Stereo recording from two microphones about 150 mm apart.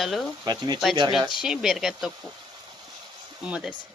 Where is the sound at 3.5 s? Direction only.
5° right (ahead or behind).